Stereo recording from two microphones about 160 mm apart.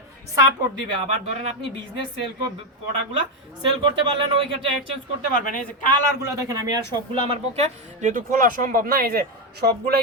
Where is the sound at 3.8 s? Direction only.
30° right (ahead or behind).